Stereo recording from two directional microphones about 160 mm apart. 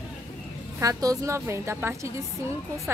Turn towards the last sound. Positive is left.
turn(degrees=-15)  # may be behind; listen again after turning